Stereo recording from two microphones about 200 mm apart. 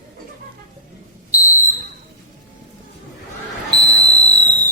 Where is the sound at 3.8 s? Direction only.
5° left (ahead or behind).